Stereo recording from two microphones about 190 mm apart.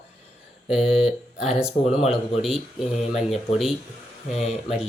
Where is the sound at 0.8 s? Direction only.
5° right (ahead or behind).